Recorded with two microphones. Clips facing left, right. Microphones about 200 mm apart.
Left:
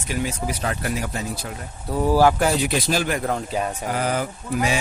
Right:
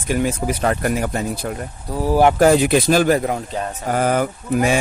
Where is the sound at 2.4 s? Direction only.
50° right (ahead or behind).